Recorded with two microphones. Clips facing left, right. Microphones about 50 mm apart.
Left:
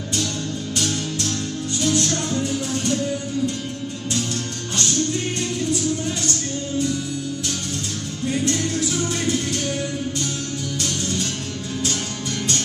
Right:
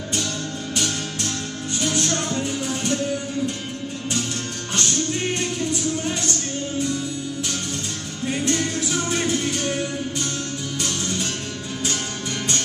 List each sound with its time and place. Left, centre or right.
0.7 s music: centre
8.3 s music: right
9.5 s music: centre
10.8 s music: centre